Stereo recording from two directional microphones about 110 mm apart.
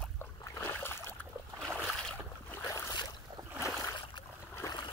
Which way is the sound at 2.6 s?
30° left (ahead or behind).